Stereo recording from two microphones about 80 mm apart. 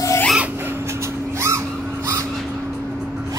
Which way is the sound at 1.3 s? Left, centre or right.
Right.